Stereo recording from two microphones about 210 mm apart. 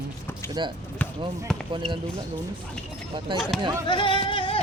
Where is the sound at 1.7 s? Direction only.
25° right (ahead or behind).